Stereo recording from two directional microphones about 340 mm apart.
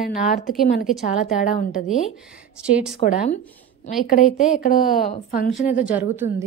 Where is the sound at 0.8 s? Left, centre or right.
Centre.